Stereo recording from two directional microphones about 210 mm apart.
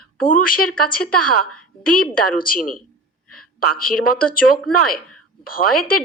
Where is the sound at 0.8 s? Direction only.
45° left (ahead or behind).